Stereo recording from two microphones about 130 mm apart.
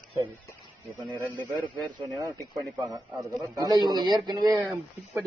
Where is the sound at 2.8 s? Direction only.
30° right (ahead or behind).